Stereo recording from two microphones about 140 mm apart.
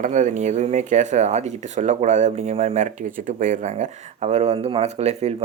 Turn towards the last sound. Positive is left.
turn(degrees=-50)  # may be behind; listen again after turning